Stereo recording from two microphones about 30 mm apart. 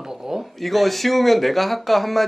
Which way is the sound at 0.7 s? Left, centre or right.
Centre.